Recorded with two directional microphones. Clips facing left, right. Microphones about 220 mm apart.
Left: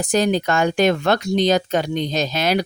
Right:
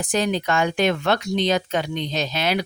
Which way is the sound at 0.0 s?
40° left (ahead or behind).